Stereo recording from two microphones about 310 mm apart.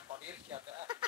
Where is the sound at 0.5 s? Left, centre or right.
Centre.